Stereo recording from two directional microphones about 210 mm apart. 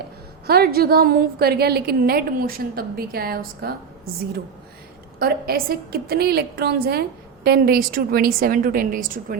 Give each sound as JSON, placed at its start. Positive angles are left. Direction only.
{"t": 0.4, "sound": "a woman's voice", "side_deg": -45}
{"t": 5.2, "sound": "a woman's voice", "side_deg": -45}